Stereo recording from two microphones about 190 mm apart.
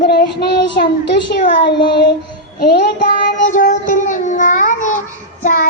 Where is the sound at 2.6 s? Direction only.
60° left (ahead or behind).